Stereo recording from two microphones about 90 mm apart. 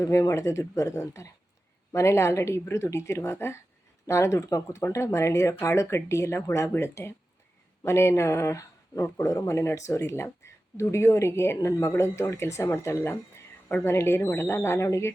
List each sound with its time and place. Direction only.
0.0 s speech: 35° left (ahead or behind)